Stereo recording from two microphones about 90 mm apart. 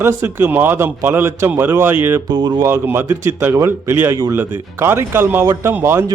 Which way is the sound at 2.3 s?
55° right (ahead or behind).